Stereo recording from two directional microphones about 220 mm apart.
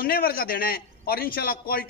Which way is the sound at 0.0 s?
45° left (ahead or behind).